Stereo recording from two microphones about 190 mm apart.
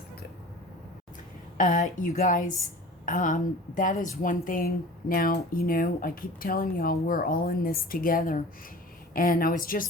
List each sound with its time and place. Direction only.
1.5 s speech: 45° left (ahead or behind)